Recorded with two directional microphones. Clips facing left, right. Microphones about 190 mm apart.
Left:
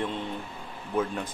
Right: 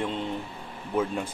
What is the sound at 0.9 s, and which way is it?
Speech, 10° right (ahead or behind).